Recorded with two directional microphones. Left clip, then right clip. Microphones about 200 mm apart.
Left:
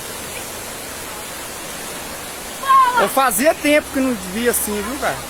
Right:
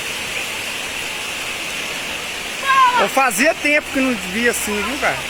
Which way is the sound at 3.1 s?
Centre (ahead or behind).